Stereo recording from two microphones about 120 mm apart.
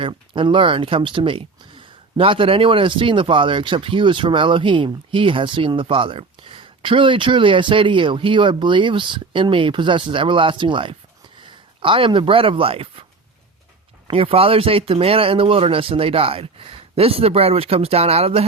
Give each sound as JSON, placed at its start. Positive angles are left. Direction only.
{"t": 0.0, "sound": "speech", "side_deg": -45}
{"t": 14.1, "sound": "speech", "side_deg": -50}